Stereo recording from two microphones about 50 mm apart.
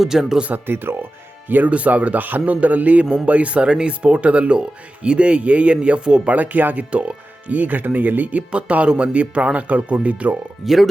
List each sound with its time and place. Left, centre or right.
0.0 s speech: centre
0.7 s speech: right
1.5 s speech: right
1.7 s speech: right
6.3 s speech: right
6.9 s speech: right
10.6 s speech: centre